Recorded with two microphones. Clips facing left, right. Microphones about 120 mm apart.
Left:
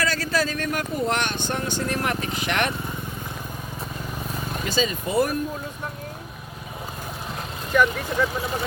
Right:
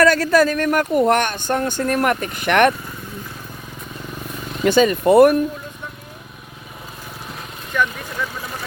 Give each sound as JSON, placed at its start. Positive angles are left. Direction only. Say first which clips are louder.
{"t": 0.0, "sound": "speech", "louder": "right 10 dB", "side_deg": -60}
{"t": 4.6, "sound": "speech", "louder": "right 12 dB", "side_deg": -60}
{"t": 7.7, "sound": "speech", "louder": "left 2 dB", "side_deg": 5}